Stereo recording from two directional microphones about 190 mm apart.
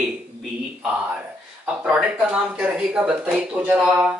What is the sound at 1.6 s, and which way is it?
Speech, 5° right (ahead or behind).